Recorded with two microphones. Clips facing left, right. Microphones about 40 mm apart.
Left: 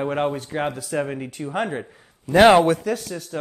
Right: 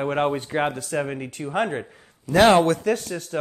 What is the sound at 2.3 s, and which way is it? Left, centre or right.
Speech, centre.